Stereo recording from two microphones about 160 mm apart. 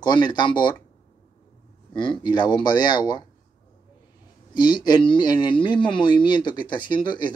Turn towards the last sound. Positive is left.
turn(degrees=30)  # may be behind; listen again after turning